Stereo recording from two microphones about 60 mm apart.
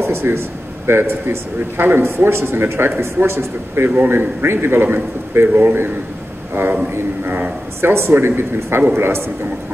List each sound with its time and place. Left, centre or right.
0.0 s a man's voice: right
6.5 s a man's voice: right